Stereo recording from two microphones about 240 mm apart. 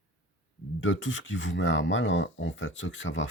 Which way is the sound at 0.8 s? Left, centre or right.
Left.